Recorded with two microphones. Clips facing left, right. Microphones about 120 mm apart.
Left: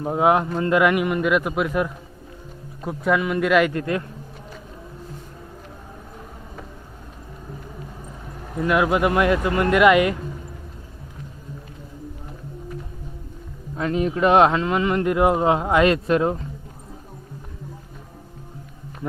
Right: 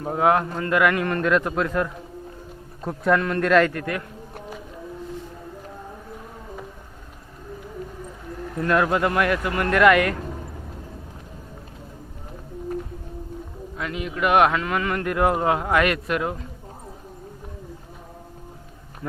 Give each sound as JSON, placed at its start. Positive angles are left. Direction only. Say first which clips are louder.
{"t": 0.0, "sound": "a man's voice", "louder": "left 1 dB", "side_deg": 20}
{"t": 2.8, "sound": "a man's voice", "louder": "even", "side_deg": 5}
{"t": 3.7, "sound": "speech", "louder": "left 4 dB", "side_deg": 25}
{"t": 8.5, "sound": "speech", "louder": "left 1 dB", "side_deg": 10}
{"t": 13.7, "sound": "speech", "louder": "left 7 dB", "side_deg": 35}